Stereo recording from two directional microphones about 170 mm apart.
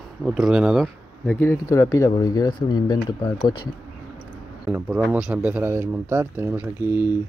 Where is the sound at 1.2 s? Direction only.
10° left (ahead or behind).